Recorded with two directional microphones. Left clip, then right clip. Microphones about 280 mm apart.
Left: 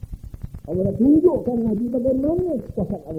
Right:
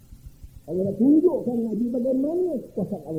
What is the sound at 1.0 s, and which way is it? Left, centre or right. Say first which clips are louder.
A man's voice: left 3 dB; left.